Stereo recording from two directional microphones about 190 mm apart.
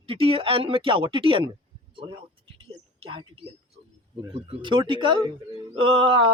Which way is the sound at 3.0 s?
25° right (ahead or behind).